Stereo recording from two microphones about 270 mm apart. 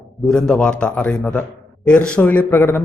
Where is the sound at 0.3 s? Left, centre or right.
Centre.